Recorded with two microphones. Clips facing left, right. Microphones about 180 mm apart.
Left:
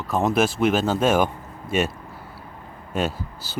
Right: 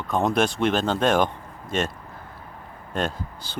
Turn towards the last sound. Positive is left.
turn(degrees=5)  # may be behind; listen again after turning